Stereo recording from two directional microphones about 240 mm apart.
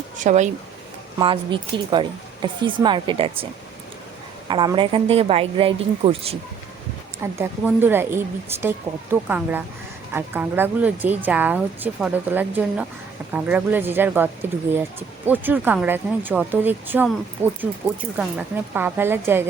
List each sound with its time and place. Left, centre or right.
0.2 s speech: right
4.4 s speech: centre
7.2 s speech: centre
18.2 s speech: centre